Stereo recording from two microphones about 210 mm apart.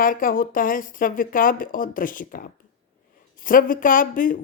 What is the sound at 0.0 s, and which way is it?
Speech, 40° left (ahead or behind).